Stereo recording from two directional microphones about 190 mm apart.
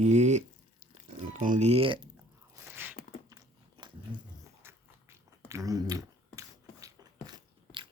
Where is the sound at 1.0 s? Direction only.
40° right (ahead or behind).